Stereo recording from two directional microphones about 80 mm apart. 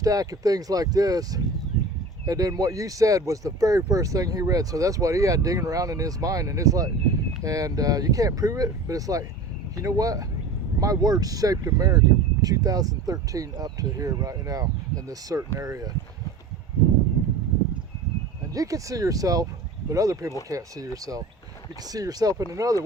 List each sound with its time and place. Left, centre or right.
0.0 s speech: right
18.5 s speech: right